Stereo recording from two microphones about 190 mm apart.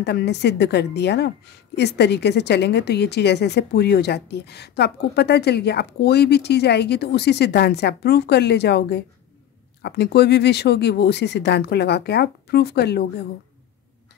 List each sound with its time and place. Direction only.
0.0 s a woman's voice: 60° left (ahead or behind)